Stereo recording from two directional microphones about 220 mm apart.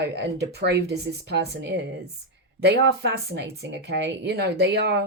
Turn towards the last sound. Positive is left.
turn(degrees=-50)  # may be behind; listen again after turning